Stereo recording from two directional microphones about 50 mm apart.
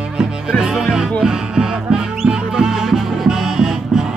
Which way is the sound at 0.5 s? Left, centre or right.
Centre.